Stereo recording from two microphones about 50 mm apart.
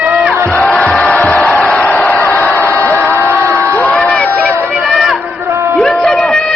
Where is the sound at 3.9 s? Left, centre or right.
Centre.